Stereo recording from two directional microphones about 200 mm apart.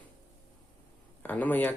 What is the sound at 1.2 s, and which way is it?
Speech, 10° left (ahead or behind).